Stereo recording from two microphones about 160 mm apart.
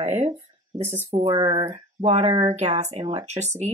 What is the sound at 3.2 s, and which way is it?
Speech, 45° right (ahead or behind).